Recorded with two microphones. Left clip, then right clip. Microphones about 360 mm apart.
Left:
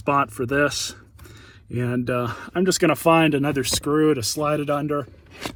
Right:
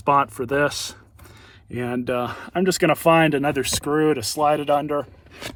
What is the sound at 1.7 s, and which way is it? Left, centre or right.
Speech, right.